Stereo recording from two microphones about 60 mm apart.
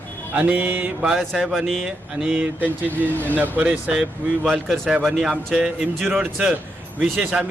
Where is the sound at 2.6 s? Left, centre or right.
Right.